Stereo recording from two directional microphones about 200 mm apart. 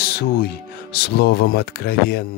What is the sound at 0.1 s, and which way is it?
Speech, 55° left (ahead or behind).